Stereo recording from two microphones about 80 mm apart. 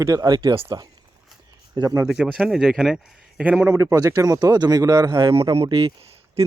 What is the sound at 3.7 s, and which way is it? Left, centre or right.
Speech, right.